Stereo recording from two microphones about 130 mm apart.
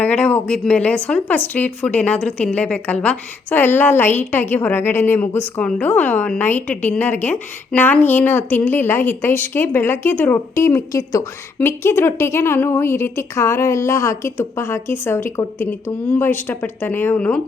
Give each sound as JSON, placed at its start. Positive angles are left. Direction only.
{"t": 0.0, "sound": "a woman's voice", "side_deg": 10}